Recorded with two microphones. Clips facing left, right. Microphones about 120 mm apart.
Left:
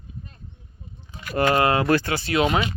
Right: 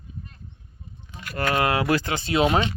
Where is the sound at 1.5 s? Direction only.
Centre (ahead or behind); by 2.4 s 20° right (ahead or behind).